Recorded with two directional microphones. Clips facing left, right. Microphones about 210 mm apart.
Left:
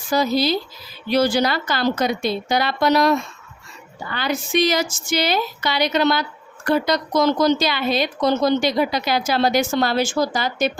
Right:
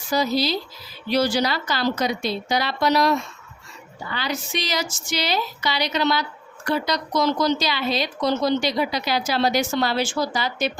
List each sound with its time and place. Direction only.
0.1 s speech: 50° left (ahead or behind)